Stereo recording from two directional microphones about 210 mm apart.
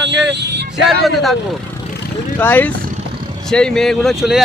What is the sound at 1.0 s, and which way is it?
Speech, centre (ahead or behind).